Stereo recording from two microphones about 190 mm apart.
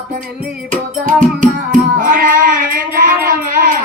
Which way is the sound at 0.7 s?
40° right (ahead or behind).